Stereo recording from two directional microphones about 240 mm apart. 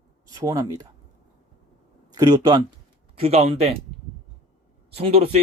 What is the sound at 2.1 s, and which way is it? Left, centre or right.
Speech, centre.